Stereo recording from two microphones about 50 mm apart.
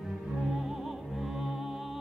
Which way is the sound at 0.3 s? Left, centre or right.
Centre.